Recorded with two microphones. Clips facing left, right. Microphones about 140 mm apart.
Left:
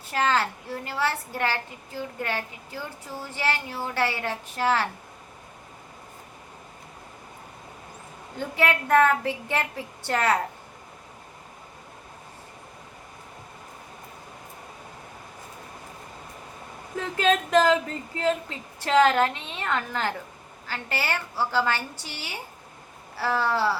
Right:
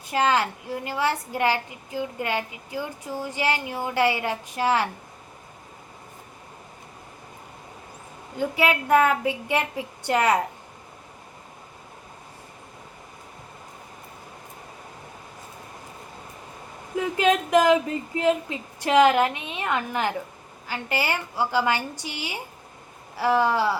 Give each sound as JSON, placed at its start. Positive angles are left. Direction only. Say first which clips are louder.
{"t": 0.1, "sound": "a woman's voice", "louder": "right 2 dB", "side_deg": -15}
{"t": 8.4, "sound": "a woman's voice", "louder": "right 2 dB", "side_deg": -10}
{"t": 17.0, "sound": "a woman's voice", "louder": "right 2 dB", "side_deg": -15}